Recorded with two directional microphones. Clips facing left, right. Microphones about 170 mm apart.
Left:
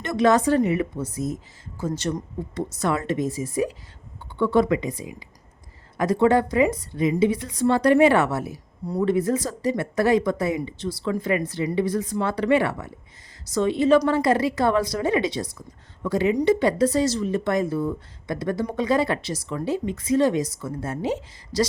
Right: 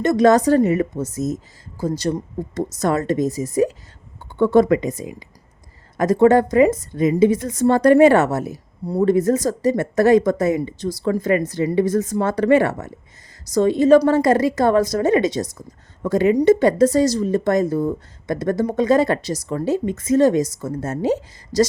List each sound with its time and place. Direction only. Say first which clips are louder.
0.0 s a woman's voice: right 5 dB; 40° right (ahead or behind)